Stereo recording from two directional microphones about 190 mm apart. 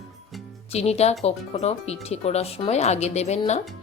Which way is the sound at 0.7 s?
35° left (ahead or behind).